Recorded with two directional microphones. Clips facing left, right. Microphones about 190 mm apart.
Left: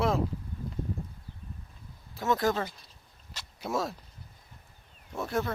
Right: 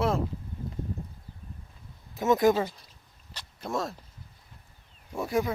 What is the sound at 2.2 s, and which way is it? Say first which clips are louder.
Speech: right 5 dB; 20° right (ahead or behind).